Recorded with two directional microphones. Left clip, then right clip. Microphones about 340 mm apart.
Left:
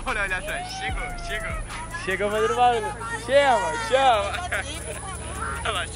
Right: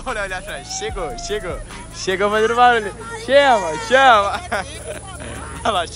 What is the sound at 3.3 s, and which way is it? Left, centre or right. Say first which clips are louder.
Speech: right 6 dB; right.